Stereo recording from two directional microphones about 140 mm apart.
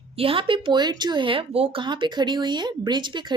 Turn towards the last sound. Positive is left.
turn(degrees=-35)  # may be behind; listen again after turning